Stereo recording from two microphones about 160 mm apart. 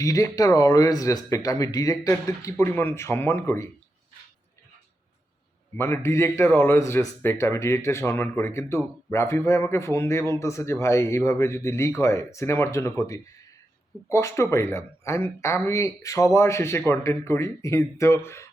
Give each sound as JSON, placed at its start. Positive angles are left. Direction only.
{"t": 0.0, "sound": "speech", "side_deg": 20}
{"t": 5.7, "sound": "a man's voice", "side_deg": 15}